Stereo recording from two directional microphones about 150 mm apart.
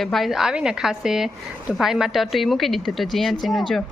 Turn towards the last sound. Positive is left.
turn(degrees=0)  # may be behind; listen again after turning